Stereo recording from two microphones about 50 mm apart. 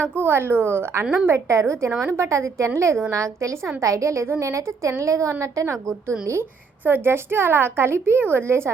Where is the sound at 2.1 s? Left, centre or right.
Right.